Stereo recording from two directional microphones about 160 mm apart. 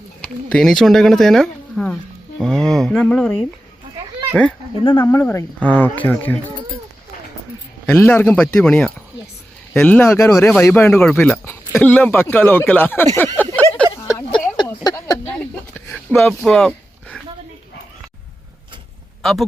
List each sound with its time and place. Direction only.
0.5 s speech: 5° left (ahead or behind)
4.4 s speech: 5° left (ahead or behind)
4.8 s speech: 30° left (ahead or behind)
5.0 s speech: 15° left (ahead or behind)
7.9 s speech: 15° left (ahead or behind)
13.1 s a sound: 15° left (ahead or behind)
15.7 s a sound: 10° left (ahead or behind)
19.2 s a man's voice: centre (ahead or behind)